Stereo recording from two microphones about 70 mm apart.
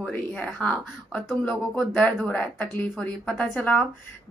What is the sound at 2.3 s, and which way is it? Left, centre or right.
Speech, centre.